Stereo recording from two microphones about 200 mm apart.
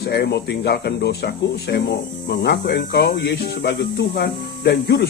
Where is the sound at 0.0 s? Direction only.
55° left (ahead or behind).